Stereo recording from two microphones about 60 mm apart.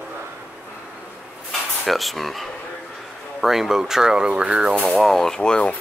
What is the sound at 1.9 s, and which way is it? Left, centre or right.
Speech, centre.